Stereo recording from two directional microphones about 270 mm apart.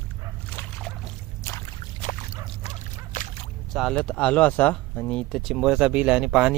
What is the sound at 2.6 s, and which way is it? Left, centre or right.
Dog, left.